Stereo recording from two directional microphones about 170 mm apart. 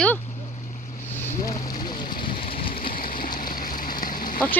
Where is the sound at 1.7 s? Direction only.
25° left (ahead or behind).